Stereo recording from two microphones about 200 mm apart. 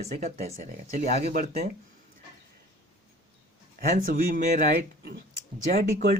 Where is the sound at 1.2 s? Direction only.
50° right (ahead or behind).